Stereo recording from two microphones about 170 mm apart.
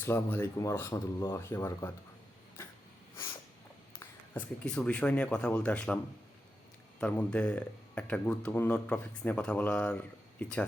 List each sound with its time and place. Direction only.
0.0 s speech: 15° left (ahead or behind)
4.0 s speech: 10° left (ahead or behind)
7.0 s speech: 5° left (ahead or behind)